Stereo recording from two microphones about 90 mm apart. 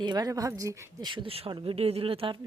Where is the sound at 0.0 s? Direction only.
55° right (ahead or behind).